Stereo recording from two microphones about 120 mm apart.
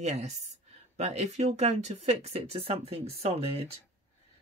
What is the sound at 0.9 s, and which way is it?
Speech, 65° right (ahead or behind).